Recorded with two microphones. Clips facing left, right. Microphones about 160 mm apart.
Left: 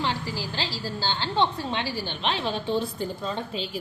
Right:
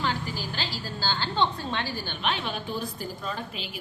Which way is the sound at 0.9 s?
20° left (ahead or behind).